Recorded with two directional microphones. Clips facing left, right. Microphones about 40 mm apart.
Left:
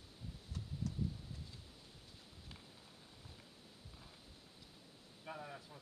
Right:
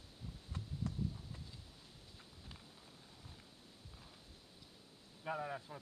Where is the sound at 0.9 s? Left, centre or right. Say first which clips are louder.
Right 1 dB; right.